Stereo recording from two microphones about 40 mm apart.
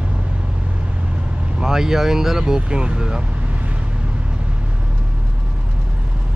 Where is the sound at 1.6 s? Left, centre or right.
Centre.